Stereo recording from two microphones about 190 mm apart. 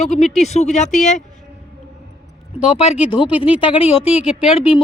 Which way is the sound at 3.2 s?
25° left (ahead or behind).